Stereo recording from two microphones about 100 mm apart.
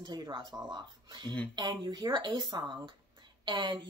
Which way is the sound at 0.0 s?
45° right (ahead or behind).